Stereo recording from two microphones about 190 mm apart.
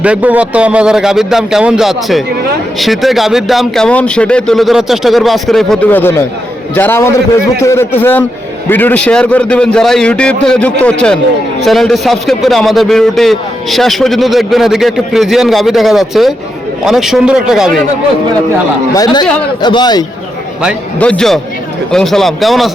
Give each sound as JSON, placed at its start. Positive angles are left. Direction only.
{"t": 0.0, "sound": "a man's voice", "side_deg": -5}
{"t": 18.9, "sound": "a man's voice", "side_deg": 20}
{"t": 21.0, "sound": "a man's voice", "side_deg": 5}